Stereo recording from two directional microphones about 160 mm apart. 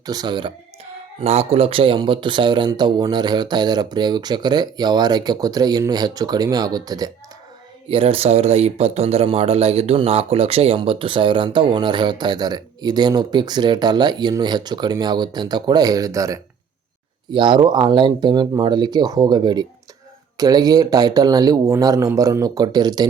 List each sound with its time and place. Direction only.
0.0 s speech: 25° right (ahead or behind)
1.2 s speech: 40° right (ahead or behind); by 7.1 s 25° right (ahead or behind)
7.9 s speech: 35° right (ahead or behind)